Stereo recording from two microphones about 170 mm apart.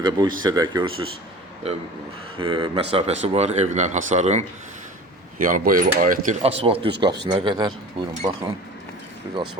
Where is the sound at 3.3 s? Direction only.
40° right (ahead or behind).